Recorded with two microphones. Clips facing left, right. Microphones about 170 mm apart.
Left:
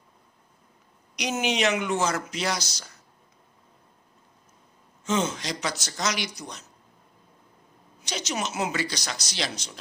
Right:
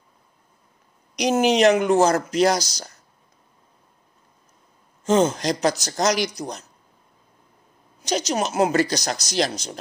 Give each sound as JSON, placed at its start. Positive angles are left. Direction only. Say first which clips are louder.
{"t": 1.1, "sound": "speech", "louder": "right 9 dB", "side_deg": -35}
{"t": 5.0, "sound": "speech", "louder": "right 8 dB", "side_deg": -40}
{"t": 8.0, "sound": "speech", "louder": "right 8 dB", "side_deg": -40}